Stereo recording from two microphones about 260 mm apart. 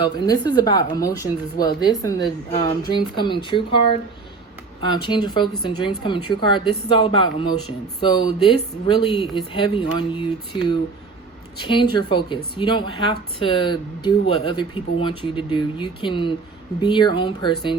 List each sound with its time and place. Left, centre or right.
0.0 s speech: centre
4.8 s speech: centre